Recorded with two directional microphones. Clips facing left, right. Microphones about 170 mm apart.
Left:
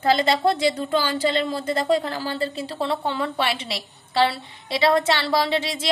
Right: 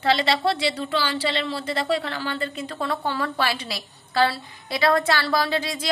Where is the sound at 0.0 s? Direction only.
45° left (ahead or behind).